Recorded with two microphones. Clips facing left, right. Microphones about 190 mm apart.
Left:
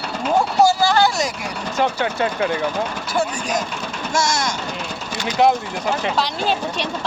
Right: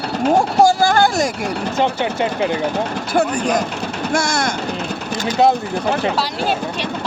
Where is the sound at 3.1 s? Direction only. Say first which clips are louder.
Right 6 dB; 60° right (ahead or behind).